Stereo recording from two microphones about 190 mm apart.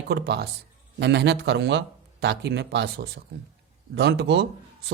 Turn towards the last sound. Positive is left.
turn(degrees=-65)  # may be behind; listen again after turning